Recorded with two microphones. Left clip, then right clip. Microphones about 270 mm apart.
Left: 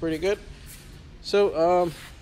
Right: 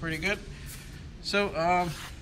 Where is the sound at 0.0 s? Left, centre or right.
Centre.